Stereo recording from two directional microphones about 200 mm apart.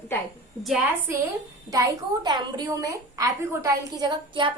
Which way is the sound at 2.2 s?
20° right (ahead or behind).